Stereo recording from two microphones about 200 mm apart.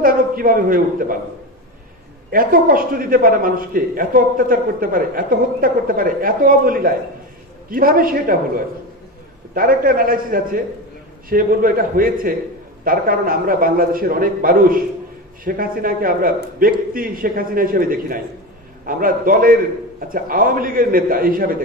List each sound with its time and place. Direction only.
0.0 s a man's voice: 45° right (ahead or behind)
2.3 s a man's voice: 45° right (ahead or behind)
9.5 s a man's voice: 45° right (ahead or behind)